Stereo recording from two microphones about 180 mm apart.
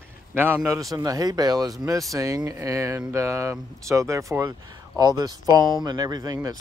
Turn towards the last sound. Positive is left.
turn(degrees=-20)  # may be behind; listen again after turning